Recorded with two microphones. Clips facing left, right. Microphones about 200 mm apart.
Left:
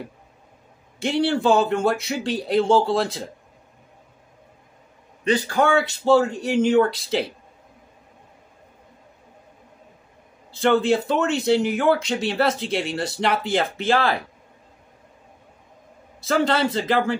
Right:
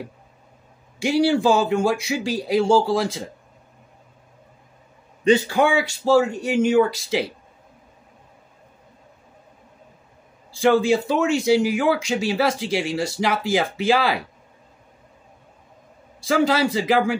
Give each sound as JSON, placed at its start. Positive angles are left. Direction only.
{"t": 1.1, "sound": "speech", "side_deg": -5}
{"t": 5.2, "sound": "a man's voice", "side_deg": -25}
{"t": 5.5, "sound": "a man's voice", "side_deg": -10}
{"t": 10.6, "sound": "speech", "side_deg": 0}
{"t": 16.3, "sound": "a man's voice", "side_deg": -5}